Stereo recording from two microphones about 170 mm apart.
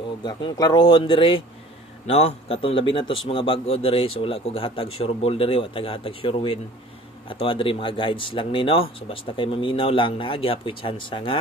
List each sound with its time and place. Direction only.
0.2 s a man's voice: 25° left (ahead or behind)